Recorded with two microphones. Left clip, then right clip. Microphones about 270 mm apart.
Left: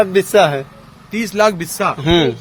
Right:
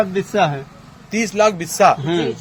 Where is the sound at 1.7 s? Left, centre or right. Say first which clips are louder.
Right 6 dB; centre.